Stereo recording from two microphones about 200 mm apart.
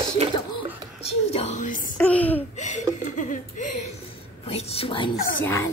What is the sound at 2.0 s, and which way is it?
Laughter, 5° left (ahead or behind).